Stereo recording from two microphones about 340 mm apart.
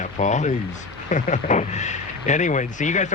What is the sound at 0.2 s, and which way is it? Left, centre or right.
Speech, left.